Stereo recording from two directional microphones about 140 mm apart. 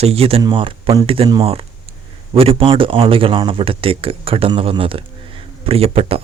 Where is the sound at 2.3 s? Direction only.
40° right (ahead or behind).